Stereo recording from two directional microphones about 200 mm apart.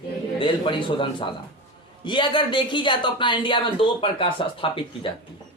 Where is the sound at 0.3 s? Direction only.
25° left (ahead or behind).